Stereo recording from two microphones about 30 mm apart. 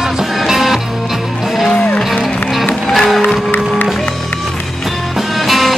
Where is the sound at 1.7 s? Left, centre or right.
Left.